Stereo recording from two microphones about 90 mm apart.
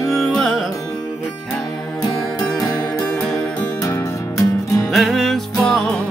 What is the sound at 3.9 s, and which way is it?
Music, 35° left (ahead or behind).